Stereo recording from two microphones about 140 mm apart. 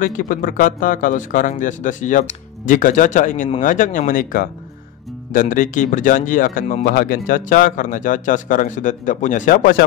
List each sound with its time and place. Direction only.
0.0 s speech: 70° left (ahead or behind); by 4.5 s 85° left
5.3 s speech: 70° left (ahead or behind)